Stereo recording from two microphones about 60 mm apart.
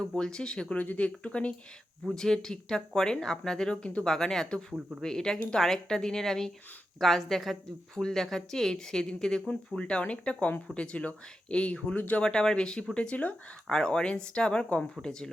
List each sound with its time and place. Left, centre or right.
0.0 s speech: centre
2.1 s a woman's voice: centre; by 12.2 s left
12.2 s speech: centre